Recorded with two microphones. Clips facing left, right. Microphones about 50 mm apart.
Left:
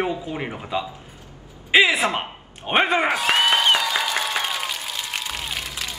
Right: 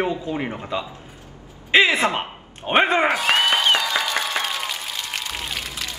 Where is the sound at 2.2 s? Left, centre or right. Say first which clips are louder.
Right 1 dB; centre.